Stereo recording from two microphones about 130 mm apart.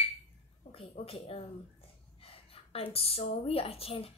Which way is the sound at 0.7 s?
45° left (ahead or behind).